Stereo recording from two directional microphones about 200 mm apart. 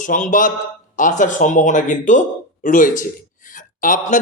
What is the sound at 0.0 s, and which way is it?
Speech, 40° left (ahead or behind).